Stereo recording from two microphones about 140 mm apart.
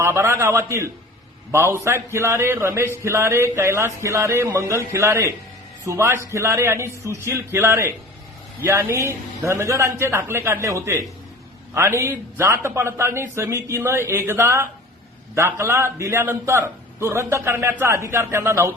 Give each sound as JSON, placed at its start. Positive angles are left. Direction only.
{"t": 0.0, "sound": "a man's voice", "side_deg": -20}